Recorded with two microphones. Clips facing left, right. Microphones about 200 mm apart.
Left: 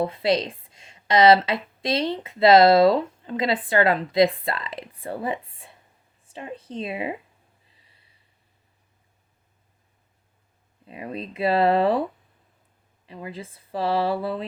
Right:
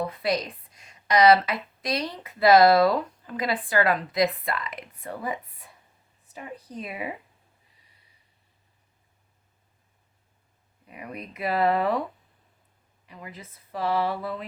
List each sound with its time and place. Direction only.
0.0 s a woman's voice: 25° left (ahead or behind)
10.8 s a woman's voice: 25° left (ahead or behind)
13.1 s a woman's voice: 30° left (ahead or behind)